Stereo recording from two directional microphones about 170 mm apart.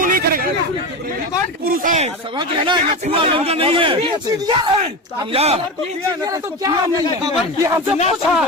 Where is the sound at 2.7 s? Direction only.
30° right (ahead or behind).